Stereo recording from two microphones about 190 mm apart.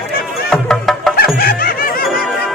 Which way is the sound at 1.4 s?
50° left (ahead or behind).